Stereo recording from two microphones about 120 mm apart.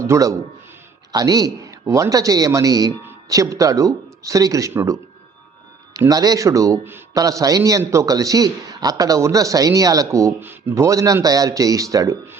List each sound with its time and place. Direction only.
0.0 s a man's voice: 25° right (ahead or behind)
6.1 s a man's voice: 30° right (ahead or behind)